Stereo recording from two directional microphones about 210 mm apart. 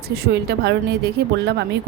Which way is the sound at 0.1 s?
50° right (ahead or behind).